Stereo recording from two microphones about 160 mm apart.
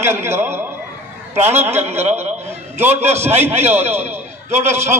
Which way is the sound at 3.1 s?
15° right (ahead or behind).